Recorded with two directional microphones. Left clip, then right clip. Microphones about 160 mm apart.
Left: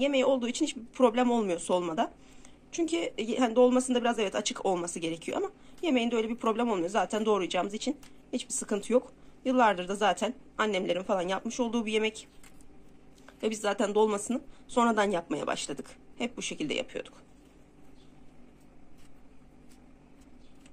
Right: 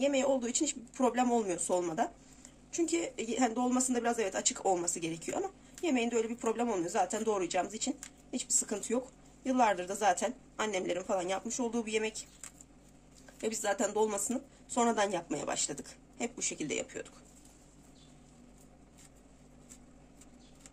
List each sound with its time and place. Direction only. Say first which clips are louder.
0.0 s a woman's voice: left 4 dB; 20° left (ahead or behind)
13.4 s a woman's voice: left 3 dB; 20° left (ahead or behind)